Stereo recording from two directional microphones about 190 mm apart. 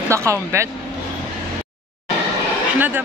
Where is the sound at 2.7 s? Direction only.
10° right (ahead or behind).